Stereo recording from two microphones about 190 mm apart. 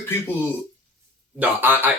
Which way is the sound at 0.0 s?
10° left (ahead or behind).